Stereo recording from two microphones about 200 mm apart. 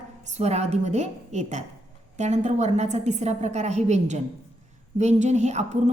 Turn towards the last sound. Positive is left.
turn(degrees=-35)  # may be behind; listen again after turning